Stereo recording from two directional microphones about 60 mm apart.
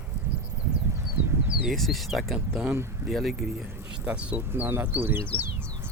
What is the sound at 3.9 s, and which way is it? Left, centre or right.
Speech, centre.